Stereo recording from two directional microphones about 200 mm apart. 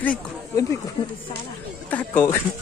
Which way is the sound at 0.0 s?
10° left (ahead or behind).